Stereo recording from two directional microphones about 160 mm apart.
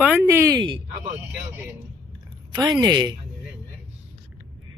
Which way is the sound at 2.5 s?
20° right (ahead or behind).